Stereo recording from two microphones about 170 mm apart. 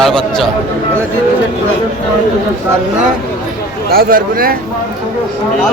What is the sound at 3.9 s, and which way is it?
Speech, 60° right (ahead or behind).